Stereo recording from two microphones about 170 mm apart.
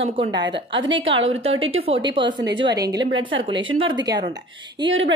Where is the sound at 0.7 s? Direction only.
90° right.